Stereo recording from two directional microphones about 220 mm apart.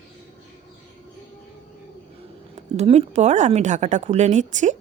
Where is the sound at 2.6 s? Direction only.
30° right (ahead or behind).